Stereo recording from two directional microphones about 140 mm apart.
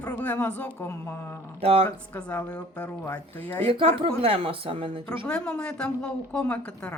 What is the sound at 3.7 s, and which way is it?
Speech, 40° right (ahead or behind).